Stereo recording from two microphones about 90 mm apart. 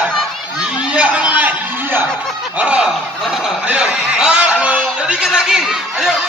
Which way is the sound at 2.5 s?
15° right (ahead or behind).